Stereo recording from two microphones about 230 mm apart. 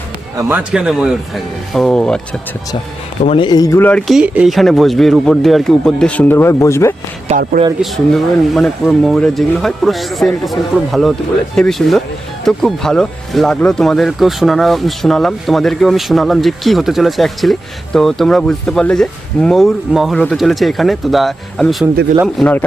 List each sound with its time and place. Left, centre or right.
0.3 s speech: centre
3.2 s speech: left
7.3 s speech: right
7.8 s speech: centre